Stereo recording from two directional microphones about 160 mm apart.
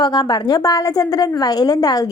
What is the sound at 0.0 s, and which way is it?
A woman's voice, 25° left (ahead or behind).